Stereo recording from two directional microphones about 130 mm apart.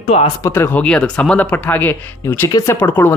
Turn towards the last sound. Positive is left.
turn(degrees=15)  # may be behind; listen again after turning